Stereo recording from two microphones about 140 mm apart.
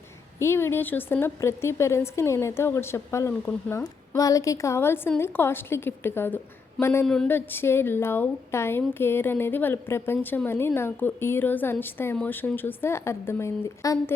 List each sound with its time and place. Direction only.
0.3 s speech: 20° left (ahead or behind)